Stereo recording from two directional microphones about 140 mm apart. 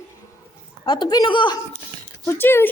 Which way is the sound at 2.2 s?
15° left (ahead or behind).